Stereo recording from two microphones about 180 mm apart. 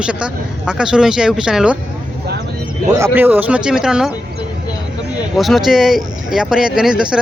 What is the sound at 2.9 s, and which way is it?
Speech, 15° right (ahead or behind).